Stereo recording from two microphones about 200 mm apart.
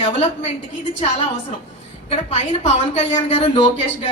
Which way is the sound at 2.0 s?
30° left (ahead or behind).